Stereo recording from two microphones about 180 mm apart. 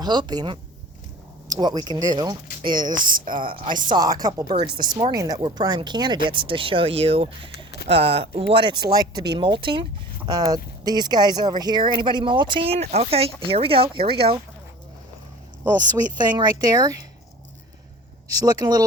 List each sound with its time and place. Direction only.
0.0 s speech: 25° right (ahead or behind)
2.9 s a woman's voice: 50° right (ahead or behind)
3.8 s speech: 20° right (ahead or behind)
7.5 s a sound: 65° left (ahead or behind)
7.9 s speech: 35° right (ahead or behind)
15.9 s speech: 25° right (ahead or behind)
18.3 s speech: 20° right (ahead or behind)